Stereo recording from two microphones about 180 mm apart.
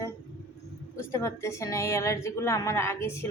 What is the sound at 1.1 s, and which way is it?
Speech, 15° left (ahead or behind).